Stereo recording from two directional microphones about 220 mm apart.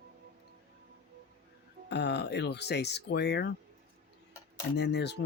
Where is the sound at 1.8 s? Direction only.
50° left (ahead or behind).